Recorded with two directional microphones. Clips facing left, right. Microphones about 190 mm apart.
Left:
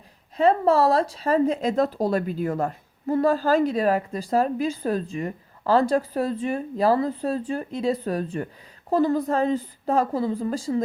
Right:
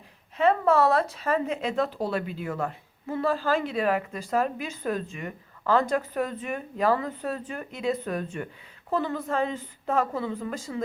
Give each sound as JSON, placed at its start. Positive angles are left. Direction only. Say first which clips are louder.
{"t": 0.3, "sound": "speech", "louder": "left 3 dB", "side_deg": 35}